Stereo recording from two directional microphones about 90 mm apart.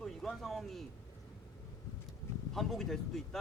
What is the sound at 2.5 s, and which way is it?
Speech, 5° left (ahead or behind).